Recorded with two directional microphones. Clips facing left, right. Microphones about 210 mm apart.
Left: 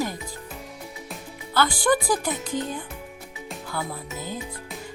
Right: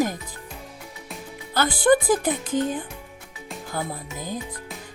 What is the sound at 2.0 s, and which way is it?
Music, 20° right (ahead or behind).